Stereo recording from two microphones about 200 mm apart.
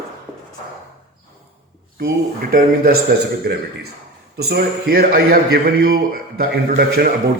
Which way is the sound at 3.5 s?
50° right (ahead or behind).